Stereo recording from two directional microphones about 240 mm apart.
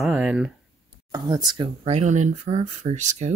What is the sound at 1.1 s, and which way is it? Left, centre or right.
Speech, centre.